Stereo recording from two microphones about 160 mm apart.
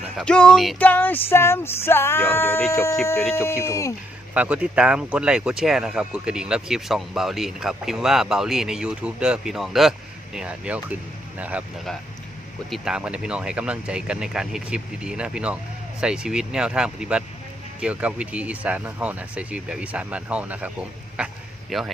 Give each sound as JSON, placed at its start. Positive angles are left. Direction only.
{"t": 0.3, "sound": "speech", "side_deg": 5}
{"t": 0.8, "sound": "a sound", "side_deg": 10}
{"t": 4.4, "sound": "speech", "side_deg": -10}
{"t": 12.7, "sound": "speech", "side_deg": -5}